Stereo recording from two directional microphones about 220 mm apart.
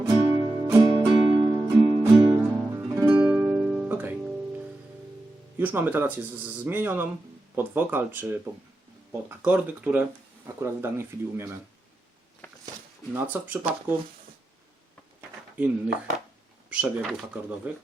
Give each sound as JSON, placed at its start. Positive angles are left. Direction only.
{"t": 0.0, "sound": "music", "side_deg": -20}
{"t": 5.5, "sound": "speech", "side_deg": -10}
{"t": 9.4, "sound": "speech", "side_deg": -5}
{"t": 13.1, "sound": "speech", "side_deg": -10}
{"t": 15.5, "sound": "speech", "side_deg": -5}